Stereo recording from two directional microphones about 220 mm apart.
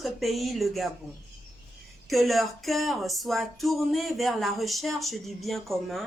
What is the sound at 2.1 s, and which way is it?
Speech, centre (ahead or behind).